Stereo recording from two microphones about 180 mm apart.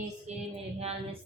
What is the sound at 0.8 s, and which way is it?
Music, 35° right (ahead or behind).